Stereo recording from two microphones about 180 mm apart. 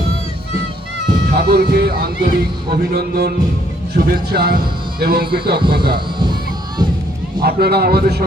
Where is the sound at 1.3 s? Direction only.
60° right (ahead or behind).